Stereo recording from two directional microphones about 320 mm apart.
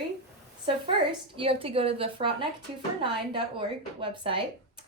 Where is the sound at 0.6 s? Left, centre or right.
Centre.